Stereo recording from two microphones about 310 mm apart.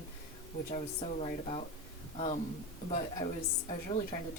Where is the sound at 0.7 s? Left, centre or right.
Left.